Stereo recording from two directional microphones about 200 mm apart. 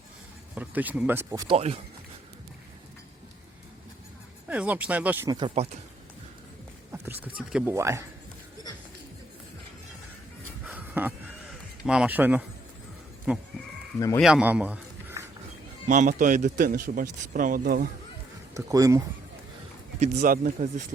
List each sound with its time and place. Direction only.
0.5 s speech: 10° right (ahead or behind)
1.5 s speech: 30° right (ahead or behind)
4.4 s speech: 5° right (ahead or behind)
5.6 s speech: 35° right (ahead or behind)
6.9 s speech: 10° right (ahead or behind)
10.7 s music: 10° right (ahead or behind)
11.9 s a man's voice: 5° right (ahead or behind)
15.9 s a man's voice: 40° right (ahead or behind)
18.5 s speech: 15° right (ahead or behind)
20.0 s speech: 40° right (ahead or behind)